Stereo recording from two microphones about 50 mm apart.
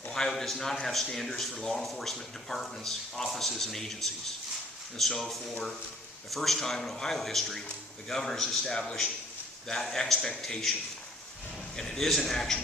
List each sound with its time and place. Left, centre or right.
0.1 s a man's voice: centre
11.8 s speech: centre